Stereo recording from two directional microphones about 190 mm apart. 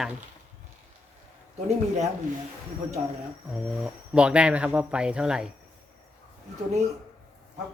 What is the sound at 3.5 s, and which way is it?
Speech, centre (ahead or behind).